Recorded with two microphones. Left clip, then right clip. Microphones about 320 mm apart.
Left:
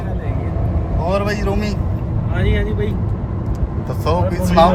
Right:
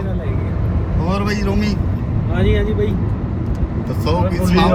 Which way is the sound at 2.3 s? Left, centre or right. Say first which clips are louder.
Right 3 dB; centre.